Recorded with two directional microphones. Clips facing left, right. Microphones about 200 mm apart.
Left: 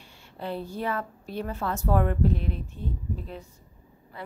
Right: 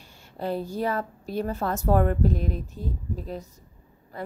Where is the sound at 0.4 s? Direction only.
40° right (ahead or behind).